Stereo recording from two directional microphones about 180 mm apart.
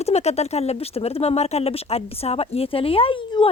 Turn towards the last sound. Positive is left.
turn(degrees=25)  # may be behind; listen again after turning